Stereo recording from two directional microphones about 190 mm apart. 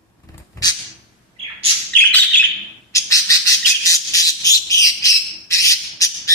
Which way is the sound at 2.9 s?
20° left (ahead or behind).